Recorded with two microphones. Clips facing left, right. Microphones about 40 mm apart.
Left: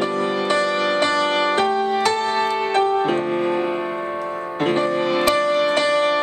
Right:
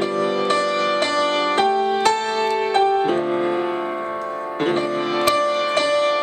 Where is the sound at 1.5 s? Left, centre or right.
Centre.